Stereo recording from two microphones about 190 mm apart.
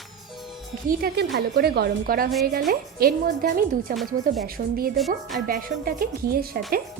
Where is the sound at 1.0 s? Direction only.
55° right (ahead or behind).